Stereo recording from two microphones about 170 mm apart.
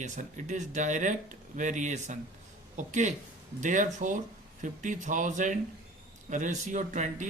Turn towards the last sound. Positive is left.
turn(degrees=-45)  # may be behind; listen again after turning